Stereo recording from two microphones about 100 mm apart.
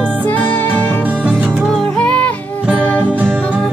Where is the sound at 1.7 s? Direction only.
10° left (ahead or behind).